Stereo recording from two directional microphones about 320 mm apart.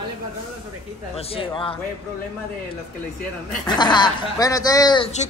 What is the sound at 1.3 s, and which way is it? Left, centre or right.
Speech, centre.